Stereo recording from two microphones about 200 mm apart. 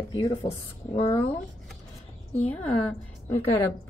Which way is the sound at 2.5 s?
5° left (ahead or behind).